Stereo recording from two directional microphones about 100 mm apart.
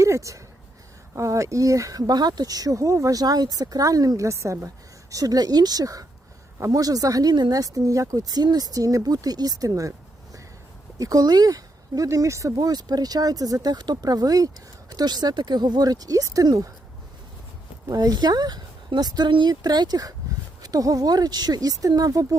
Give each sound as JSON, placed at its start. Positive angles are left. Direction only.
{"t": 0.0, "sound": "speech", "side_deg": -30}
{"t": 10.9, "sound": "speech", "side_deg": -35}
{"t": 17.8, "sound": "speech", "side_deg": -40}